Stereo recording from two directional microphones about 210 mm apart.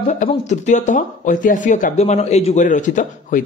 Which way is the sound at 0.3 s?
35° left (ahead or behind).